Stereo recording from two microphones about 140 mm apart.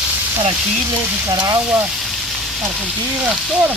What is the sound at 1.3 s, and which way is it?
Speech, 25° right (ahead or behind).